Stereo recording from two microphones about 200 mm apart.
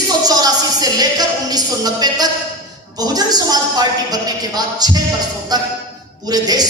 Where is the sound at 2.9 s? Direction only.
20° right (ahead or behind).